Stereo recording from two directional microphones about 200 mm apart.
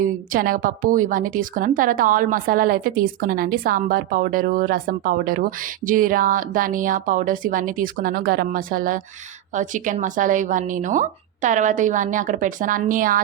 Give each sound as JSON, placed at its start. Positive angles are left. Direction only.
{"t": 0.0, "sound": "a woman's voice", "side_deg": -45}